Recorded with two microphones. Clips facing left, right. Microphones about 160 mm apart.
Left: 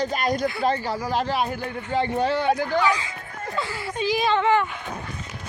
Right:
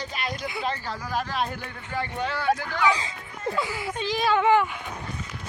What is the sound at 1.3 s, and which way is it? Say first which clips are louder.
Speech: left 4 dB; 5° left (ahead or behind).